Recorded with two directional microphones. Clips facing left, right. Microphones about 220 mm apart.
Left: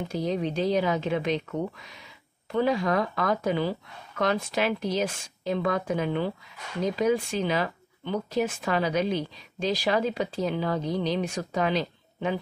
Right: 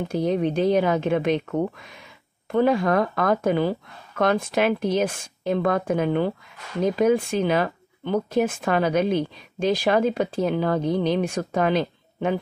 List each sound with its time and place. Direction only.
0.1 s speech: 55° right (ahead or behind)